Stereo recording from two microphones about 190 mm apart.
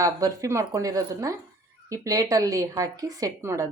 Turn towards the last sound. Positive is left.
turn(degrees=-15)  # may be behind; listen again after turning